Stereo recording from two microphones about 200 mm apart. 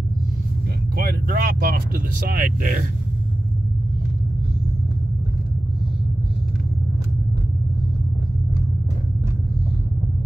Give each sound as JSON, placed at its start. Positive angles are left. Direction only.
{"t": 0.9, "sound": "vehicle", "side_deg": -50}
{"t": 2.1, "sound": "speech", "side_deg": -45}